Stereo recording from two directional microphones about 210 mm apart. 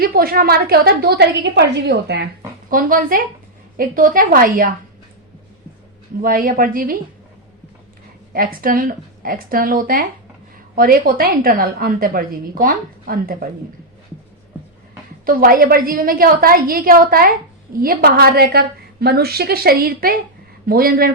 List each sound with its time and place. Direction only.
0.0 s a woman's voice: 45° right (ahead or behind)
2.6 s a woman's voice: 40° right (ahead or behind)
6.2 s a woman's voice: 45° right (ahead or behind)
8.3 s a woman's voice: 45° right (ahead or behind)
15.3 s a woman's voice: 45° right (ahead or behind)